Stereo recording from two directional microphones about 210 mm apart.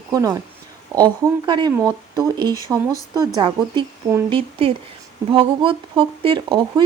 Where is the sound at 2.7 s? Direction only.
10° right (ahead or behind).